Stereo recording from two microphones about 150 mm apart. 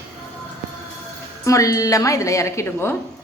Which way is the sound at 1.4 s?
20° left (ahead or behind).